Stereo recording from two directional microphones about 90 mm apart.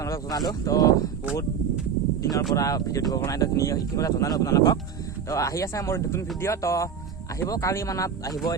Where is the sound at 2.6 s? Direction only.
40° left (ahead or behind).